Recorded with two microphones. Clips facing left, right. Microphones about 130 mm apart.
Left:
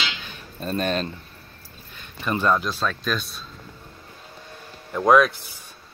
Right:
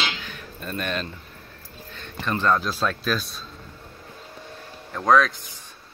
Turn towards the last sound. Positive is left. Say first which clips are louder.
# left 2 dB
turn(degrees=10)  # may be behind; listen again after turning